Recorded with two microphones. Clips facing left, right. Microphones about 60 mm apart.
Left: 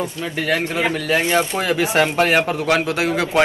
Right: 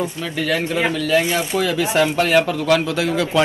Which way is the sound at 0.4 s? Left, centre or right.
Left.